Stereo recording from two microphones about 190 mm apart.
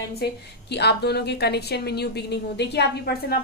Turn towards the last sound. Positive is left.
turn(degrees=60)  # may be behind; listen again after turning